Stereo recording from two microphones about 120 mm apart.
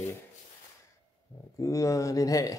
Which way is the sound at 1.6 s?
25° left (ahead or behind).